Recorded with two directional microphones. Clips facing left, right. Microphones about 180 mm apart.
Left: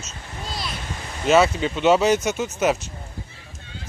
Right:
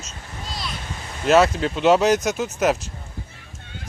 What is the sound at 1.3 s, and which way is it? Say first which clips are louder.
Speech: right 1 dB; centre (ahead or behind).